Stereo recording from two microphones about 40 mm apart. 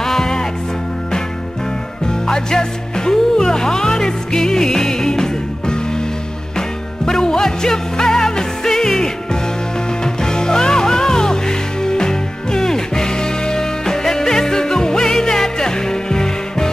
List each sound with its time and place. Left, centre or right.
0.0 s music: centre
2.0 s music: centre
7.1 s music: centre